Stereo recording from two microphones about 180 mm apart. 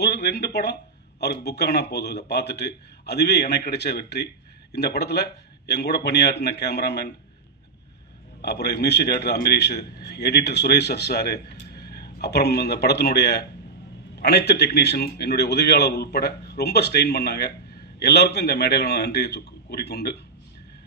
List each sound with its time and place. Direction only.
0.0 s a man's voice: 65° left (ahead or behind)
8.4 s a man's voice: 65° left (ahead or behind)